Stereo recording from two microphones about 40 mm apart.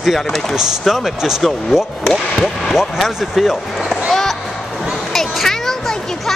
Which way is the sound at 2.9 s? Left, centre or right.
Centre.